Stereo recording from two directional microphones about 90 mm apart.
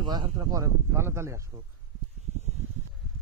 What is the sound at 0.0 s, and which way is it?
Speech, 50° right (ahead or behind).